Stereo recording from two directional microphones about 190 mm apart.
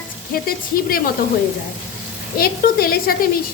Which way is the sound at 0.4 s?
50° left (ahead or behind).